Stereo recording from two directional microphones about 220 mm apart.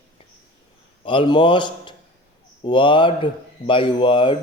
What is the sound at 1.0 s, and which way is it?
A man's voice, 25° left (ahead or behind).